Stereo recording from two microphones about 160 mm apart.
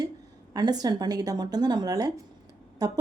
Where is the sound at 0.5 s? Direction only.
25° right (ahead or behind).